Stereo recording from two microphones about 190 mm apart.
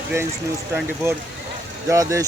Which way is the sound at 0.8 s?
10° right (ahead or behind).